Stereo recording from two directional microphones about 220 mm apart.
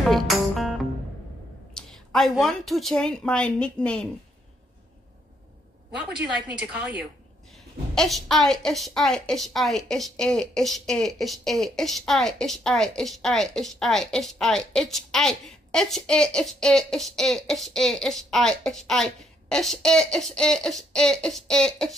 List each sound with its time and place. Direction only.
0.1 s music: centre (ahead or behind)
1.7 s a woman's voice: centre (ahead or behind)
6.3 s a woman's voice: 5° right (ahead or behind)